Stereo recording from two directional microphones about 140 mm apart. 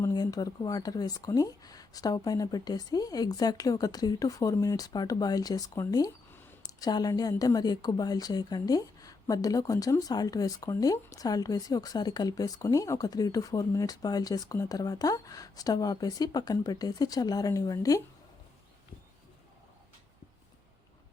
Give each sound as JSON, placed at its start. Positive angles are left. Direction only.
{"t": 0.0, "sound": "a woman's voice", "side_deg": 30}